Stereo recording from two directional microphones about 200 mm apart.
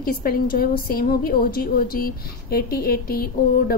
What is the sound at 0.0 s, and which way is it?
A woman's voice, 45° left (ahead or behind).